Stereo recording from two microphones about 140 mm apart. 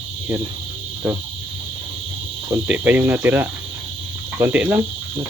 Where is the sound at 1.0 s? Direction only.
10° right (ahead or behind).